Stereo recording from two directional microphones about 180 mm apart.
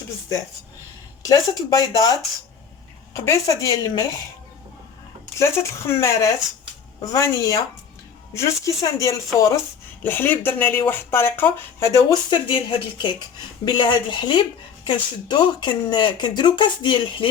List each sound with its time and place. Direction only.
1.2 s speech: 20° left (ahead or behind)
3.2 s speech: 20° left (ahead or behind)
5.4 s speech: 15° left (ahead or behind)